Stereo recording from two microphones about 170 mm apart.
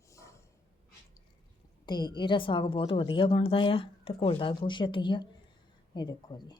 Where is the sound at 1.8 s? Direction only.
25° left (ahead or behind).